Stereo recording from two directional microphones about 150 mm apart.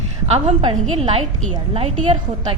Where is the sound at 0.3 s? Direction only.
40° right (ahead or behind).